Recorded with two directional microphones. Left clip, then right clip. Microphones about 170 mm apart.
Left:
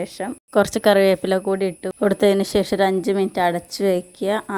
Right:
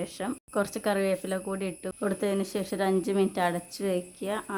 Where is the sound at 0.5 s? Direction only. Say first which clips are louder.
Left 13 dB; 45° left (ahead or behind).